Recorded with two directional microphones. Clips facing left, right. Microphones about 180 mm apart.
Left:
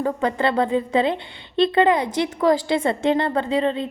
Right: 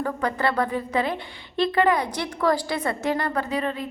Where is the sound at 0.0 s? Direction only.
25° left (ahead or behind).